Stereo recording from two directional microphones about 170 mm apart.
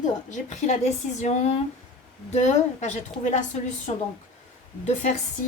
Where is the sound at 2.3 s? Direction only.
45° left (ahead or behind).